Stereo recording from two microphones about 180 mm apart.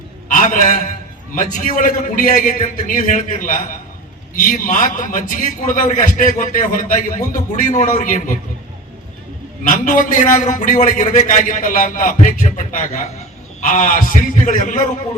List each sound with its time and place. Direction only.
0.3 s a man's voice: 45° left (ahead or behind)
9.6 s a man's voice: 45° left (ahead or behind)